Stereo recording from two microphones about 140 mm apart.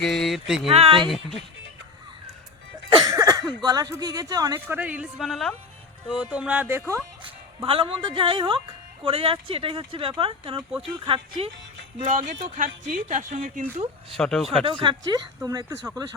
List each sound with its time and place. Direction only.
0.1 s speech: centre (ahead or behind)
0.7 s speech: 45° right (ahead or behind)
2.9 s speech: 30° right (ahead or behind)
4.7 s speech: 10° right (ahead or behind)
7.2 s speech: 40° right (ahead or behind)
10.7 s speech: 10° right (ahead or behind)
11.0 s speech: 40° right (ahead or behind)
12.0 s speech: 70° right (ahead or behind)
14.2 s speech: 5° left (ahead or behind)
14.6 s speech: 35° right (ahead or behind)